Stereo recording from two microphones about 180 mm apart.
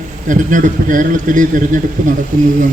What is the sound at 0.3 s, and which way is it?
A man's voice, 45° right (ahead or behind).